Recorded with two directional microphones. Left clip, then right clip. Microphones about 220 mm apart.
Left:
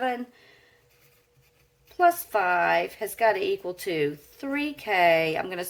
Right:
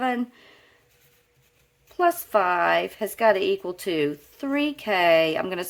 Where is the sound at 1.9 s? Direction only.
40° right (ahead or behind).